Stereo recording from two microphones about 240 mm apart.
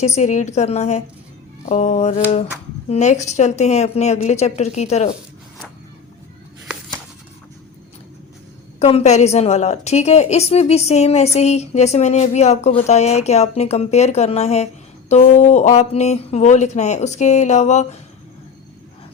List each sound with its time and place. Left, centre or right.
0.0 s a woman's voice: left
8.8 s a woman's voice: left